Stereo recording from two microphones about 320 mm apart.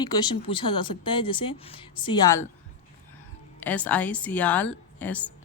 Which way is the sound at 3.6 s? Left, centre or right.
Centre.